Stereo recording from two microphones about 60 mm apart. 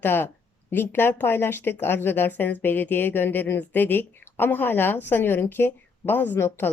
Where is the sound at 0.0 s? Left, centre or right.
Left.